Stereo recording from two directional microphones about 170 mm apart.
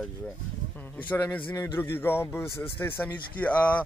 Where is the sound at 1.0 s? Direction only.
10° left (ahead or behind).